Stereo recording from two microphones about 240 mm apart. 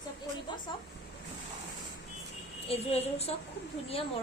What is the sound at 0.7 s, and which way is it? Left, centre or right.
Speech, centre.